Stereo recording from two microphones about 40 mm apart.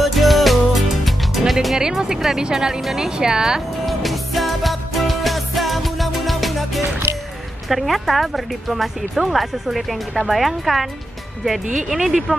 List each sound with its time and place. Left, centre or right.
0.0 s music: centre
1.8 s speech: centre
3.8 s music: centre
7.6 s speech: centre